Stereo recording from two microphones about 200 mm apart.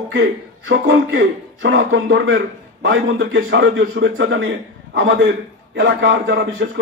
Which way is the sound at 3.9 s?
65° right (ahead or behind).